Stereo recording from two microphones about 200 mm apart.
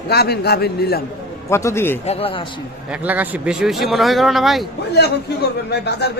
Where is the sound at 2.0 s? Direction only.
30° left (ahead or behind).